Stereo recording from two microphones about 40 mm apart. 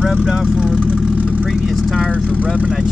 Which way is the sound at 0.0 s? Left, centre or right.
Right.